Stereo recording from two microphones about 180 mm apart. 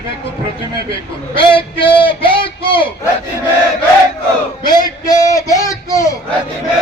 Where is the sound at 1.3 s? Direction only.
30° left (ahead or behind).